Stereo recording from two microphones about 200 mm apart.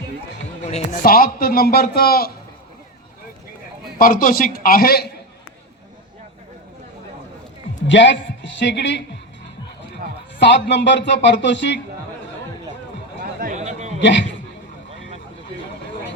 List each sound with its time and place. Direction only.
0.6 s a man's voice: 45° left (ahead or behind)
3.9 s a man's voice: 45° left (ahead or behind)
7.9 s speech: 65° left (ahead or behind)
10.3 s speech: 60° left (ahead or behind)
13.4 s a sound: 35° right (ahead or behind)
14.0 s speech: 65° left (ahead or behind)